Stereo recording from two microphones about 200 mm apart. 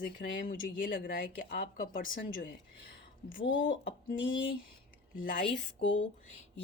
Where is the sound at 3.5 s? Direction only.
70° left (ahead or behind).